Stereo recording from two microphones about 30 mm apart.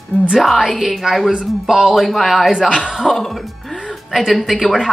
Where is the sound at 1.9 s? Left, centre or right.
Centre.